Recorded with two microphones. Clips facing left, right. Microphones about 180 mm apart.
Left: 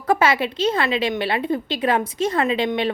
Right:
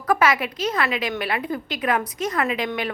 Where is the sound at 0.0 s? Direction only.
25° left (ahead or behind).